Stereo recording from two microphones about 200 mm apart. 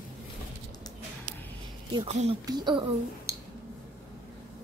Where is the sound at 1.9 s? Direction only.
30° right (ahead or behind).